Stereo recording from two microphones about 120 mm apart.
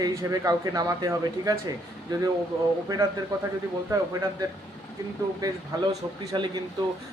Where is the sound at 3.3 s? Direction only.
30° right (ahead or behind).